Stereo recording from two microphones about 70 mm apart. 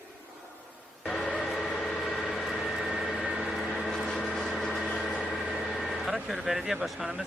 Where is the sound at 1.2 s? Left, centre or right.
Centre.